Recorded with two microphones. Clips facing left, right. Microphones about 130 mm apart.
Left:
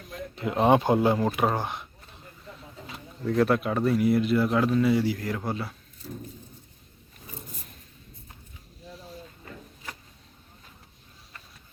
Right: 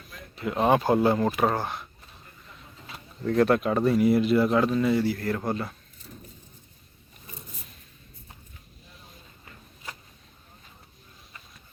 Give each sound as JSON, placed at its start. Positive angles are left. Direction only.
{"t": 0.6, "sound": "speech", "side_deg": 20}
{"t": 3.2, "sound": "speech", "side_deg": 0}